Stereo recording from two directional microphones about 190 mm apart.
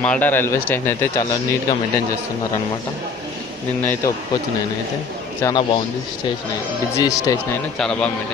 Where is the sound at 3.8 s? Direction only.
10° left (ahead or behind).